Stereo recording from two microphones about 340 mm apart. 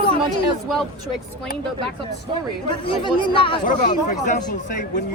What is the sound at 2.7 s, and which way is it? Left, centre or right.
Speech, centre.